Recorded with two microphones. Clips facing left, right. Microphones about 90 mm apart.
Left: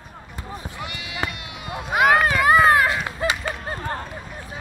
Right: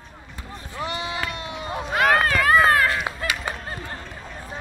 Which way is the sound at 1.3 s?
30° right (ahead or behind).